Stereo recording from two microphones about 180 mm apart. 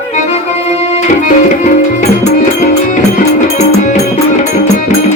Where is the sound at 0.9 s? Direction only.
45° left (ahead or behind).